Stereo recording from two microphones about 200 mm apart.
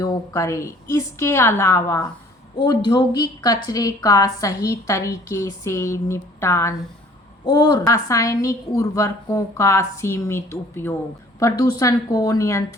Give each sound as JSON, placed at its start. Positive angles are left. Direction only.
{"t": 0.0, "sound": "a woman's voice", "side_deg": 15}